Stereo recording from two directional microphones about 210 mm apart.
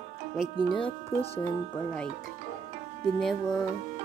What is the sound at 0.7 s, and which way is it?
Speech, 25° left (ahead or behind).